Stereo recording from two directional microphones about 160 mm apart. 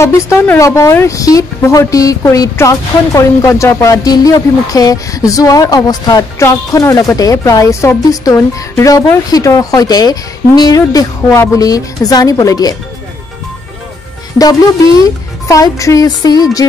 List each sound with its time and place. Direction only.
0.0 s speech: 15° left (ahead or behind)
15.0 s speech: 20° left (ahead or behind)